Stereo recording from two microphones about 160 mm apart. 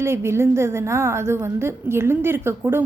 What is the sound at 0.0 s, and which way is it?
A woman's voice, 15° right (ahead or behind).